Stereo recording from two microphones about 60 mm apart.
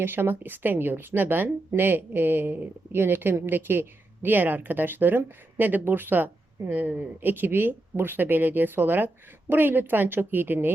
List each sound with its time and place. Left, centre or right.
0.0 s speech: right